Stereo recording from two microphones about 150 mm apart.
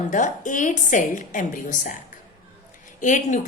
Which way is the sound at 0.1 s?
60° left (ahead or behind).